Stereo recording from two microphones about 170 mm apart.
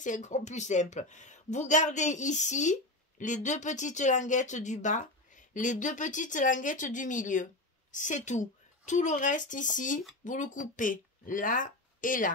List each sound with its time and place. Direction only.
0.0 s speech: 45° left (ahead or behind)